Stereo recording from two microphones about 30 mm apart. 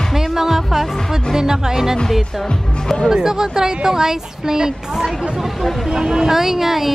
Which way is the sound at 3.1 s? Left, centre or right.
Right.